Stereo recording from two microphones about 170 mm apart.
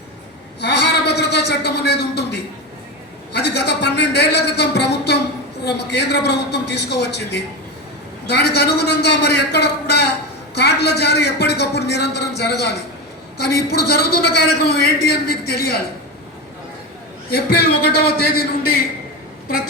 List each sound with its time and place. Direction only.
0.6 s a sound: 80° left
3.3 s a man's voice: 75° left (ahead or behind)
17.3 s a man's voice: 65° left (ahead or behind)